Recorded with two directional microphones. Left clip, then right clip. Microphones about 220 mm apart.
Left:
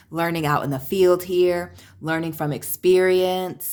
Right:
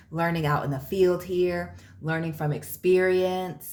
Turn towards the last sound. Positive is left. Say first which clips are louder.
# left 5 dB
turn(degrees=45)  # may be behind; listen again after turning